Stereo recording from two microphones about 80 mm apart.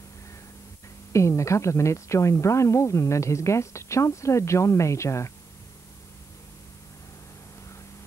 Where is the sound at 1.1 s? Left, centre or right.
Left.